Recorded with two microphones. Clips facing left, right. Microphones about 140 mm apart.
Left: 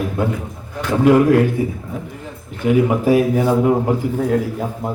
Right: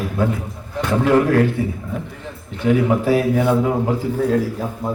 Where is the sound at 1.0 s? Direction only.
15° left (ahead or behind).